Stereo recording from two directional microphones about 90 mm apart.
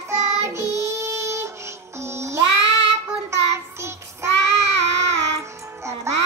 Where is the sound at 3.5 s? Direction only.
30° right (ahead or behind).